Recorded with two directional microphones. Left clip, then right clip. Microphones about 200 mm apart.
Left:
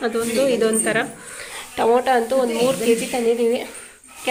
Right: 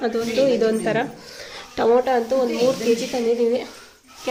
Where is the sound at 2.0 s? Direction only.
5° right (ahead or behind).